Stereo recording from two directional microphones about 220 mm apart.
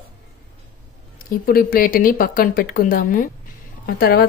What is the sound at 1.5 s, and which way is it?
A woman's voice, 40° left (ahead or behind).